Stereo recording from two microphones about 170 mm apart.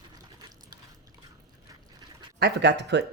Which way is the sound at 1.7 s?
25° right (ahead or behind).